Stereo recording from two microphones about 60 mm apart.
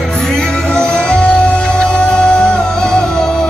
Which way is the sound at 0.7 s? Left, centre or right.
Centre.